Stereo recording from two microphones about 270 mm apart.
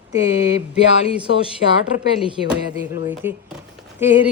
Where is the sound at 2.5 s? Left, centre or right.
Centre.